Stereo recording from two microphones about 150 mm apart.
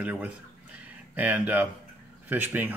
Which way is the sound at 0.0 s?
10° right (ahead or behind).